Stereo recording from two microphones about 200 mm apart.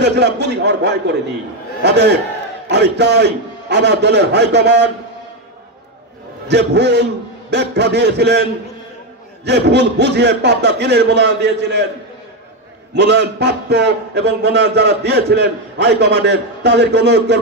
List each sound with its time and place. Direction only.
0.0 s a man's voice: 55° right (ahead or behind)
6.4 s a man's voice: 60° right (ahead or behind)
12.9 s a man's voice: 60° right (ahead or behind)